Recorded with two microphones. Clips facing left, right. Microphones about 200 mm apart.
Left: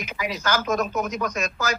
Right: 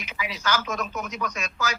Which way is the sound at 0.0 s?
45° left (ahead or behind).